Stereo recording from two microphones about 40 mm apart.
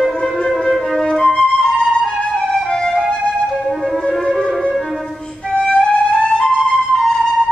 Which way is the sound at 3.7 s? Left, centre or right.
Centre.